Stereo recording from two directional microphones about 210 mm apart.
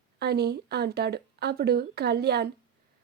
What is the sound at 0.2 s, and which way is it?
Speech, 50° right (ahead or behind).